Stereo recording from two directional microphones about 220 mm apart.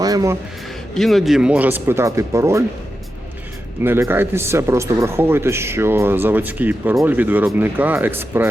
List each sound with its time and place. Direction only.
0.0 s music: 15° right (ahead or behind)
0.9 s speech: centre (ahead or behind)
3.8 s speech: 10° right (ahead or behind)